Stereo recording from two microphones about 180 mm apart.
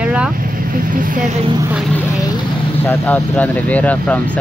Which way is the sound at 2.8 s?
10° left (ahead or behind).